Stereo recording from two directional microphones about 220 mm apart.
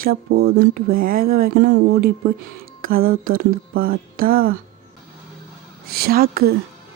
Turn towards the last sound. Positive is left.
turn(degrees=-45)  # may be behind; listen again after turning